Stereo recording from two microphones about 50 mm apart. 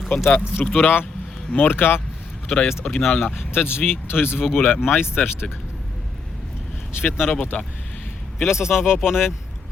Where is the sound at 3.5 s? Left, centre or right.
Left.